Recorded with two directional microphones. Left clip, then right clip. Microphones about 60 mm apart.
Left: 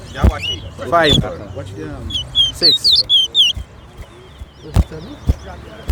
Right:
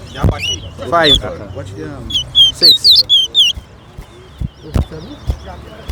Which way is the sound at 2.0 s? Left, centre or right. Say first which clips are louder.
Right 6 dB; right.